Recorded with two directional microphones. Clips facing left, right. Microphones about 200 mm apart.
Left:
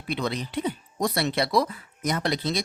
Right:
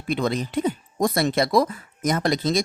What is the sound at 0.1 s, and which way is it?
Speech, 45° right (ahead or behind).